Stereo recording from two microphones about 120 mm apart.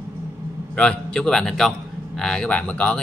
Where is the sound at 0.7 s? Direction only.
10° left (ahead or behind).